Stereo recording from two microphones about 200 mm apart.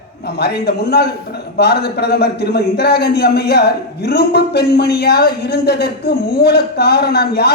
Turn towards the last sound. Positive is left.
turn(degrees=55)  # may be behind; listen again after turning